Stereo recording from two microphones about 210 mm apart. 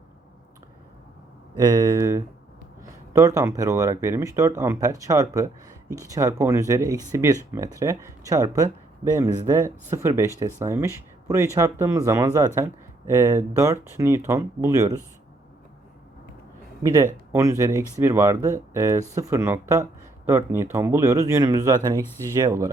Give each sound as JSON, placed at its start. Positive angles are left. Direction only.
{"t": 1.6, "sound": "speech", "side_deg": -15}
{"t": 16.8, "sound": "speech", "side_deg": -15}